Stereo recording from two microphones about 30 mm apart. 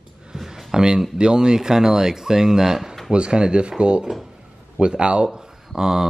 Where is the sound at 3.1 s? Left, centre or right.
Right.